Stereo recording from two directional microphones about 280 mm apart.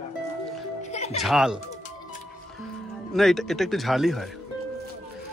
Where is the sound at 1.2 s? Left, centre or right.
Centre.